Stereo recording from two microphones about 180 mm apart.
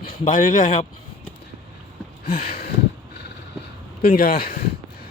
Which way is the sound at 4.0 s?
55° left (ahead or behind).